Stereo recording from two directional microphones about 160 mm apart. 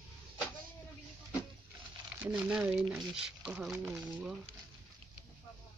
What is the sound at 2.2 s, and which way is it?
Speech, 10° right (ahead or behind).